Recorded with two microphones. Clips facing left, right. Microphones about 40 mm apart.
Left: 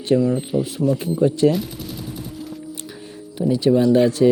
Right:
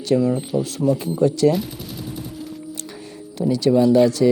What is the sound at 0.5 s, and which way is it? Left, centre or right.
Speech, right.